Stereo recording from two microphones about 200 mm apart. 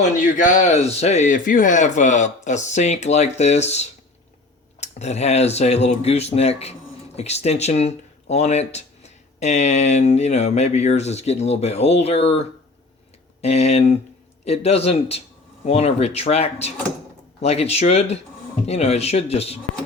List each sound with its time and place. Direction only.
0.0 s speech: 40° left (ahead or behind)
13.4 s speech: 30° left (ahead or behind)